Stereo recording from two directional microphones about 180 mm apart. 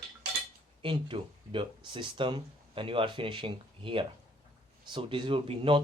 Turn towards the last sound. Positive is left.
turn(degrees=-30)  # may be behind; listen again after turning